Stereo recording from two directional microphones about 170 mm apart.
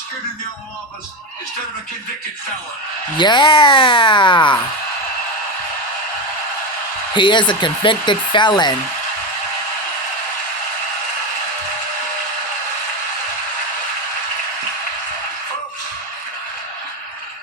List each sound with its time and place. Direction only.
3.2 s speech: 25° left (ahead or behind)
7.1 s speech: 30° left (ahead or behind)